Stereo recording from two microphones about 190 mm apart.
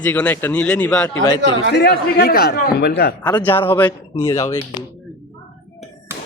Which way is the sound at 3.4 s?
10° left (ahead or behind).